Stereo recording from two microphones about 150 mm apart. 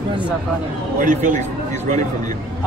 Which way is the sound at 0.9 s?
60° right (ahead or behind).